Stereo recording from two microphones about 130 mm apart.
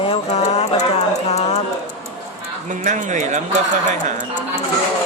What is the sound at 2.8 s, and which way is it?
Speech, 70° right (ahead or behind).